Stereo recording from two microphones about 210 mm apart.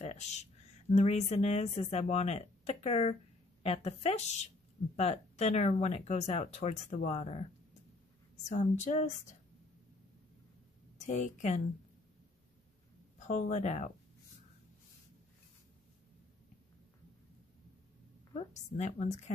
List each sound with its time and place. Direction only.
0.0 s speech: 30° left (ahead or behind)
8.5 s speech: 35° left (ahead or behind)
11.1 s speech: 35° left (ahead or behind)
13.2 s speech: 35° left (ahead or behind)
18.3 s speech: 35° left (ahead or behind)